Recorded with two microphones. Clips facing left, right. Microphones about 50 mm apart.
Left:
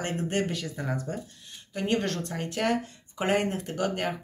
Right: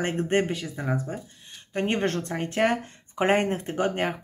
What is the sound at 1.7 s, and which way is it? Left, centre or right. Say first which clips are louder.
Speech: right 2 dB; right.